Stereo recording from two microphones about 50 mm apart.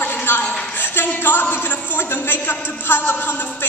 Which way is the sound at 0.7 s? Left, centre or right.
Left.